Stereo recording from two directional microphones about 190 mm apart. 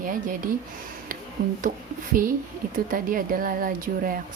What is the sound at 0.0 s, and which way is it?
Speech, 45° right (ahead or behind).